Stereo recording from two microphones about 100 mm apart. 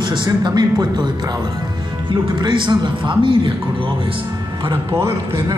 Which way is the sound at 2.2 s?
50° right (ahead or behind).